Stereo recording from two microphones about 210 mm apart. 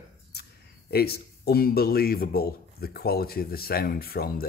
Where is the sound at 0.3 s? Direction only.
50° left (ahead or behind).